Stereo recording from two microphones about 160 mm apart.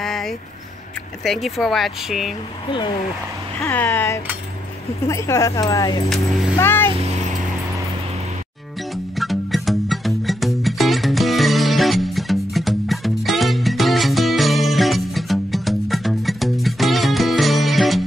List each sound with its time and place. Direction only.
0.0 s a sound: centre (ahead or behind)
1.2 s speech: centre (ahead or behind)
3.6 s speech: 15° left (ahead or behind)
6.6 s a child's voice: 15° left (ahead or behind)
6.9 s vehicle: 40° right (ahead or behind)
8.9 s music: centre (ahead or behind)